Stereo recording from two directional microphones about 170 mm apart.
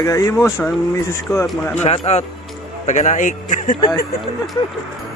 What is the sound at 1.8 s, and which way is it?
A man's voice, 40° left (ahead or behind).